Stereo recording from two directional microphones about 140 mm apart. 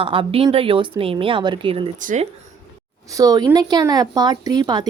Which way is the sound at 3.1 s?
25° right (ahead or behind).